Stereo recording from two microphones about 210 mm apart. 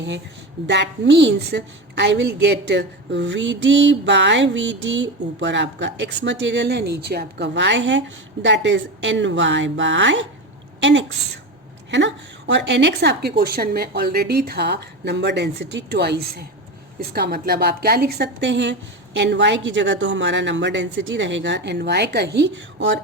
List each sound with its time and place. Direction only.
0.7 s a woman's voice: 55° right (ahead or behind)
10.8 s a sound: 60° right (ahead or behind)
11.9 s a woman's voice: 55° right (ahead or behind)